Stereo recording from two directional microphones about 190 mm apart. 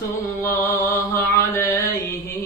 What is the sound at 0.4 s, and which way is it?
Mantra, 15° left (ahead or behind).